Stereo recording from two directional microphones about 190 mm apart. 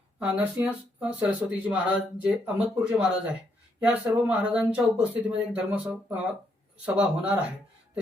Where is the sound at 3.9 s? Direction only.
10° right (ahead or behind).